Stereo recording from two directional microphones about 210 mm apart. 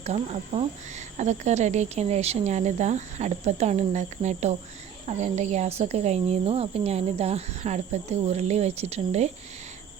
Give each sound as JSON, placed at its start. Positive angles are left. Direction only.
{"t": 0.0, "sound": "speech", "side_deg": -30}